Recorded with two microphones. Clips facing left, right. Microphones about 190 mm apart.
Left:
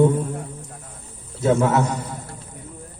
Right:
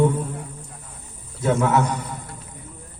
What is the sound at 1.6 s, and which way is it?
Speech, 30° left (ahead or behind).